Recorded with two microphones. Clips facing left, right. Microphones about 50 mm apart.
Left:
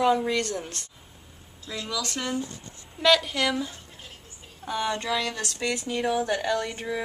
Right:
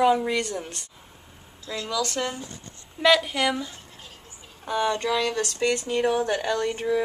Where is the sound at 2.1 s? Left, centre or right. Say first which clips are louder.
Even; centre.